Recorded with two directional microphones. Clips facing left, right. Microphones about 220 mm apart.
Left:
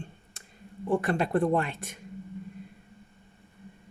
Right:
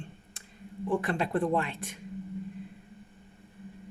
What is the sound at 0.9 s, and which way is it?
Speech, 40° left (ahead or behind).